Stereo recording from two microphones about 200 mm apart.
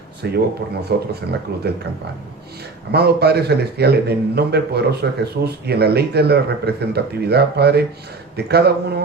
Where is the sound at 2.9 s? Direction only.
55° right (ahead or behind).